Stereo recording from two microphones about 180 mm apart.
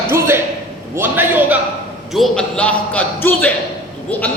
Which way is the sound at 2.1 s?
Centre (ahead or behind).